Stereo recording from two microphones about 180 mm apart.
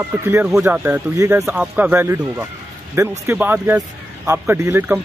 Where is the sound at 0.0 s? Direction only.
10° right (ahead or behind).